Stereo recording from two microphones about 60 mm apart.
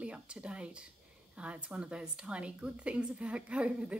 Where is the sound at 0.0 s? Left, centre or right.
Centre.